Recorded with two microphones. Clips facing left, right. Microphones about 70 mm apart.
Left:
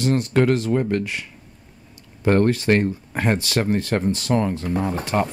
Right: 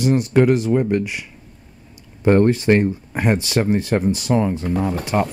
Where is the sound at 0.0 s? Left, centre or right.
Centre.